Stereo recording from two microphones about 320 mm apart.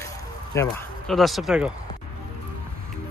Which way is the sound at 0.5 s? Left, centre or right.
Centre.